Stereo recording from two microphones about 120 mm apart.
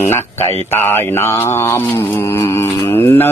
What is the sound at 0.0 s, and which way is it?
Mantra, 20° left (ahead or behind).